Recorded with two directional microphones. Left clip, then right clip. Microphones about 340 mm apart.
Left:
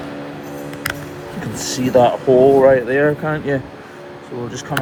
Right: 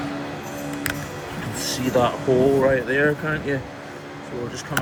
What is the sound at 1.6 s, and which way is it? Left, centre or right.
Speech, centre.